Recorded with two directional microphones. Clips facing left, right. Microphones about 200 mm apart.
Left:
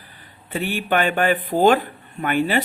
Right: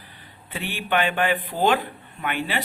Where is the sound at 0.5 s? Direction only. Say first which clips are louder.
Left 4 dB; 45° left (ahead or behind).